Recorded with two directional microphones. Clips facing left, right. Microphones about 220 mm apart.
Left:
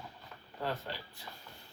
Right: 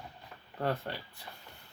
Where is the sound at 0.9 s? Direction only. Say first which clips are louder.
Right 2 dB; 55° right (ahead or behind).